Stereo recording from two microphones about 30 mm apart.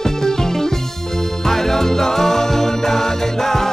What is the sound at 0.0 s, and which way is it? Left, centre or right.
Music, centre.